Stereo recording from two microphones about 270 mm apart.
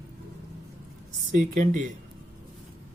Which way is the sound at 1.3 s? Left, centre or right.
Right.